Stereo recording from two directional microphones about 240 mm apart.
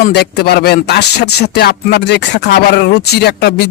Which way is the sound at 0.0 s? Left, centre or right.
Left.